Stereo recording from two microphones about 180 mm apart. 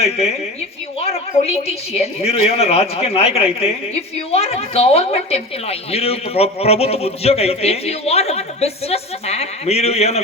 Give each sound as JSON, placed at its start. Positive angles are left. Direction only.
{"t": 0.0, "sound": "a woman's voice", "side_deg": 35}